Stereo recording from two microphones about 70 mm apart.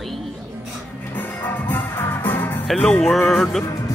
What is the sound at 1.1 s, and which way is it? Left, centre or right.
Music, left.